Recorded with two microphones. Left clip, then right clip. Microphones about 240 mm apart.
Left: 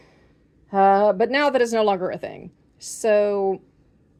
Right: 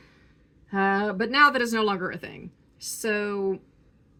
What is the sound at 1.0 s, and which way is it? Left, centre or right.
Speech, centre.